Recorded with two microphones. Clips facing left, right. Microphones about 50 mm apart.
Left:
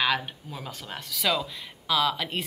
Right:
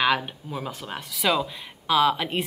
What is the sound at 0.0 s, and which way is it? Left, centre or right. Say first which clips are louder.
A woman's voice: right 3 dB; centre.